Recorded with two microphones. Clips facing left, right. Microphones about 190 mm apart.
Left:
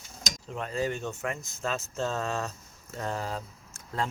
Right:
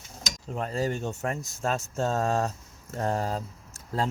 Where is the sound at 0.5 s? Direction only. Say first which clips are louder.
Right 2 dB; 40° right (ahead or behind).